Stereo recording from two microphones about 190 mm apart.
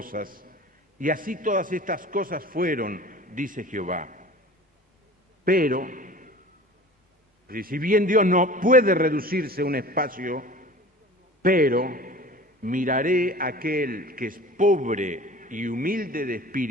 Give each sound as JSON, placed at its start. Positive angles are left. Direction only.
{"t": 0.0, "sound": "a man's voice", "side_deg": -50}
{"t": 5.5, "sound": "a man's voice", "side_deg": -50}
{"t": 7.4, "sound": "a man's voice", "side_deg": -50}